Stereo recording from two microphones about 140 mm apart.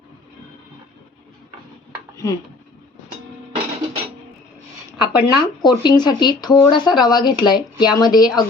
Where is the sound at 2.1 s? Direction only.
20° left (ahead or behind).